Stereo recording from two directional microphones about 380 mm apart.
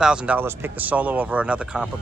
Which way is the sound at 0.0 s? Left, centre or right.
Centre.